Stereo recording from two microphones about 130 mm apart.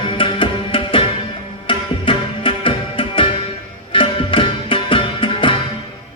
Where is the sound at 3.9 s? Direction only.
40° left (ahead or behind).